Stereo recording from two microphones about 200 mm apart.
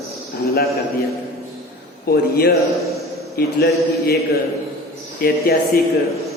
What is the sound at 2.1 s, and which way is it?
A man's voice, 50° left (ahead or behind).